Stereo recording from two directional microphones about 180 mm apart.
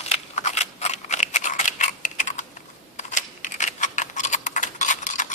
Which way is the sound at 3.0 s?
40° left (ahead or behind).